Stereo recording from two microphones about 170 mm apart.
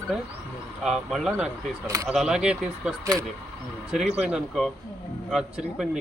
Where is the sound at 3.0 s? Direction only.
20° right (ahead or behind).